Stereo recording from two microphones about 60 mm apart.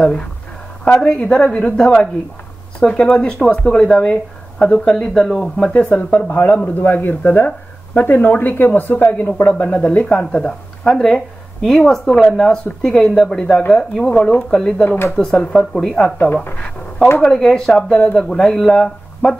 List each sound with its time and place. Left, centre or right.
0.0 s speech: centre
3.2 s speech: centre
6.2 s speech: left; by 16.2 s centre
17.2 s speech: centre